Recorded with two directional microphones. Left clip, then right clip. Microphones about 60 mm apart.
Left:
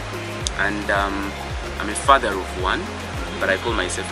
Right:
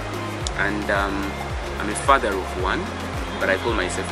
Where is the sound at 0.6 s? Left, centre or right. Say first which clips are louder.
Left 1 dB; right.